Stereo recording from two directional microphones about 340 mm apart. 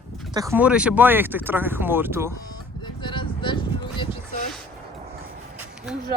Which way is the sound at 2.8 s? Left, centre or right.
Centre.